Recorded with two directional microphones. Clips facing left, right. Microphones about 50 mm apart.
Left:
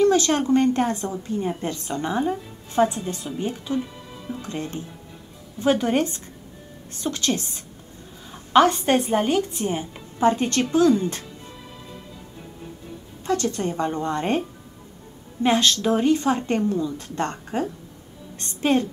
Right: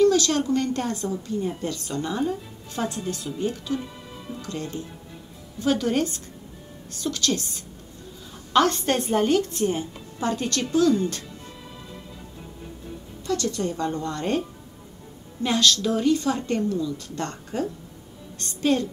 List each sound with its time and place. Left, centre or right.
0.0 s a woman's voice: left
9.9 s a woman's voice: left
13.2 s a woman's voice: left
15.4 s a woman's voice: left